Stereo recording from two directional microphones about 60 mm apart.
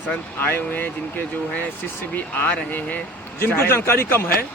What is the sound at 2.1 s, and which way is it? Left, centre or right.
Speech, left.